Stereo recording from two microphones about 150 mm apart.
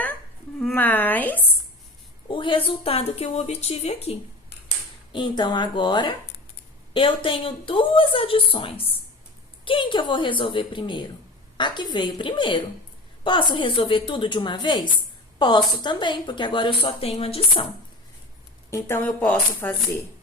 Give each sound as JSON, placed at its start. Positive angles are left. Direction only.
{"t": 0.6, "sound": "a sound", "side_deg": 10}
{"t": 2.2, "sound": "a woman's voice", "side_deg": 35}
{"t": 5.1, "sound": "speech", "side_deg": 30}
{"t": 18.7, "sound": "speech", "side_deg": 15}